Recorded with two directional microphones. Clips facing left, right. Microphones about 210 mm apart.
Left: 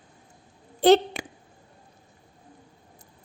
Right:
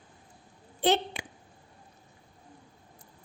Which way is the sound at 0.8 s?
40° left (ahead or behind).